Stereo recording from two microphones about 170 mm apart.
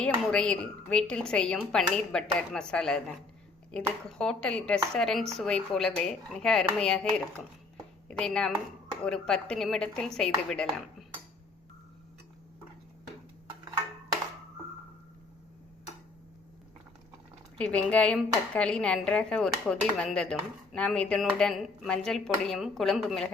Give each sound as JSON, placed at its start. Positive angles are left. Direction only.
{"t": 0.0, "sound": "a woman's voice", "side_deg": 5}
{"t": 4.2, "sound": "a woman's voice", "side_deg": 5}
{"t": 17.6, "sound": "a woman's voice", "side_deg": 5}